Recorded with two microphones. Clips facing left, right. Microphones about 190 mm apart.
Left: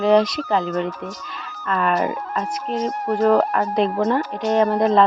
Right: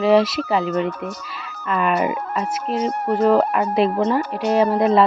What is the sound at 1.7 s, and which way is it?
Speech, 5° right (ahead or behind).